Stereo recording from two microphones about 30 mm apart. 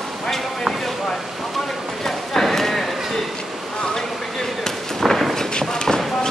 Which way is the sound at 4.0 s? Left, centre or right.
Centre.